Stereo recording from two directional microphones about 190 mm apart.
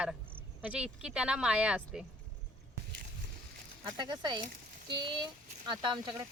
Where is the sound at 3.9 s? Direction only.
25° right (ahead or behind).